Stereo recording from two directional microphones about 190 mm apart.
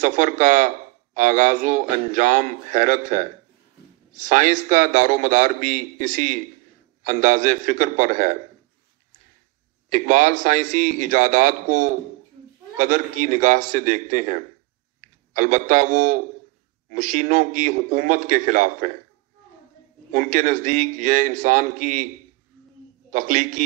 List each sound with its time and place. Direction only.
0.0 s a man's voice: 40° right (ahead or behind)
9.8 s a man's voice: 45° right (ahead or behind)
20.1 s a man's voice: 40° right (ahead or behind)
23.1 s a man's voice: 40° right (ahead or behind)